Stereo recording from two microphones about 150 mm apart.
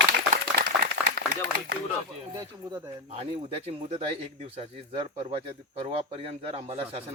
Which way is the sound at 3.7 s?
45° right (ahead or behind).